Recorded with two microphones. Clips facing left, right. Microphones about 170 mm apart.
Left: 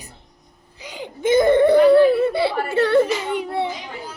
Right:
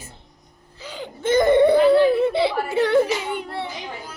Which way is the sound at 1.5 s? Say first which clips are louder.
Left 2 dB; 15° right (ahead or behind).